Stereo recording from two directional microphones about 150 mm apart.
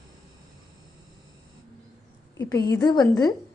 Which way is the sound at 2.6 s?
25° left (ahead or behind).